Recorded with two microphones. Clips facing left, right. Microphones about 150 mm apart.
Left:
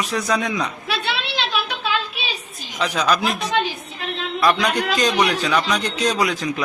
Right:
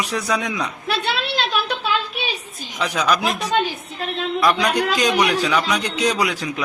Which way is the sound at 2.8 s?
10° right (ahead or behind).